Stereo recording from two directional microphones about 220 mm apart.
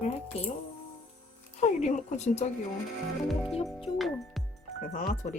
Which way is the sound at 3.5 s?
25° left (ahead or behind).